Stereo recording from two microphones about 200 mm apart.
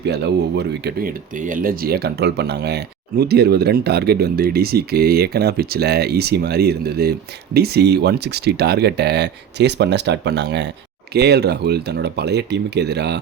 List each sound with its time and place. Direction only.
0.0 s speech: 55° right (ahead or behind)